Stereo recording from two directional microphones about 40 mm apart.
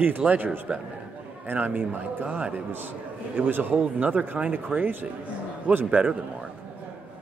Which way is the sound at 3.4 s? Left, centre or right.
Right.